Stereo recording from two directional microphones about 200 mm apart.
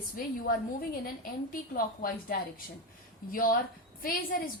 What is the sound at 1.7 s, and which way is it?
Speech, 45° left (ahead or behind).